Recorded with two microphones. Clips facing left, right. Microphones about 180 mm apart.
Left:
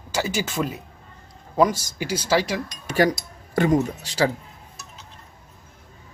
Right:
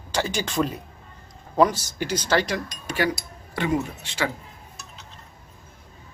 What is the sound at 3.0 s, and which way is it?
Speech, 40° left (ahead or behind).